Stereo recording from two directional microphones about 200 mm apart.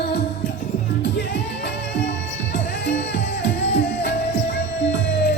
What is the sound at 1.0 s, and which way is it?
Music, 60° left (ahead or behind).